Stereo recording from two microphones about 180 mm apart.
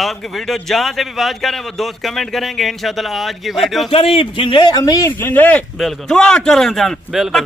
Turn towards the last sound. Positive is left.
turn(degrees=0)  # may be behind; listen again after turning